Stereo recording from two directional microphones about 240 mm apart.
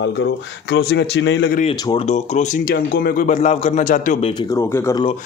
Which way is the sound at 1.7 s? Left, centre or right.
Centre.